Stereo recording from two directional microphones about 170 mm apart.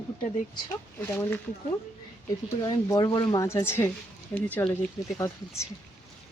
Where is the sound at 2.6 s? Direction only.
25° left (ahead or behind).